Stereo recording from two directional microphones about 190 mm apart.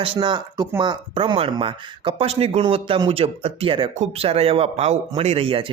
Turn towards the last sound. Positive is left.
turn(degrees=-30)  # may be behind; listen again after turning